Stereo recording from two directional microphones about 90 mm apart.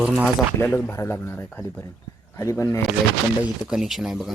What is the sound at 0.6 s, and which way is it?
Speech, 25° left (ahead or behind).